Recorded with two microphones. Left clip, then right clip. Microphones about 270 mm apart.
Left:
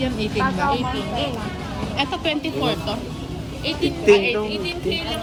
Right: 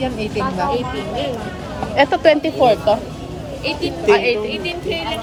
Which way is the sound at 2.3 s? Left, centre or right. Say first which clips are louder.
Right 9 dB; right.